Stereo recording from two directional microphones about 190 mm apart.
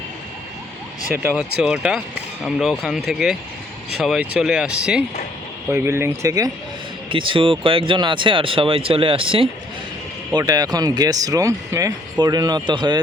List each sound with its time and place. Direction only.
1.4 s speech: 5° right (ahead or behind)
7.1 s speech: 25° right (ahead or behind)